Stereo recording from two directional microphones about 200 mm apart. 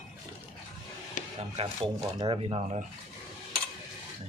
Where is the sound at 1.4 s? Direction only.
30° right (ahead or behind).